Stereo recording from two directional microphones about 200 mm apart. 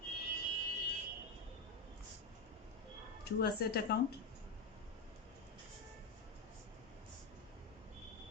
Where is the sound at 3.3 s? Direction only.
50° left (ahead or behind).